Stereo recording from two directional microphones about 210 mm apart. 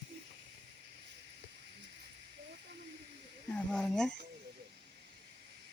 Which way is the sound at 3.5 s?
5° left (ahead or behind).